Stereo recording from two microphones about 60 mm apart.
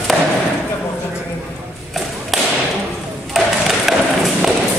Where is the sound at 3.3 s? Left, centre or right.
Centre.